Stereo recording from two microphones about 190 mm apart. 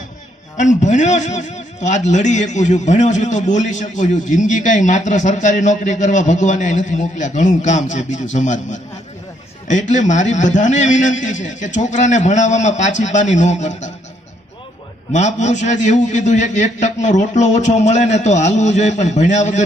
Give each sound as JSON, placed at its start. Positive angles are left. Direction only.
{"t": 0.5, "sound": "a man's voice", "side_deg": 40}
{"t": 15.1, "sound": "a man's voice", "side_deg": 40}